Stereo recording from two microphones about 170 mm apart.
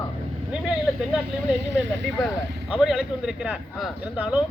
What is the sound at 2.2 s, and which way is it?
A man's voice, 5° right (ahead or behind).